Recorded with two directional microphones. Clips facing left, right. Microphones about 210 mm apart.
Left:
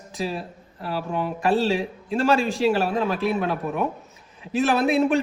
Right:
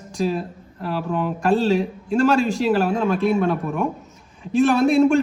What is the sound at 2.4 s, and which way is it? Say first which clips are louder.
Speech: right 3 dB; 45° right (ahead or behind).